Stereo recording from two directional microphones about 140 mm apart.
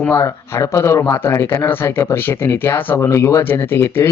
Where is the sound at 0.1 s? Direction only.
20° left (ahead or behind).